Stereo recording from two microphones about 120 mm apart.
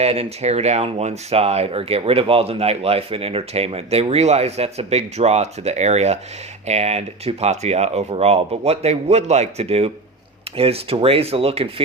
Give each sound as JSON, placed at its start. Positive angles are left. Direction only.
{"t": 0.0, "sound": "speech", "side_deg": -60}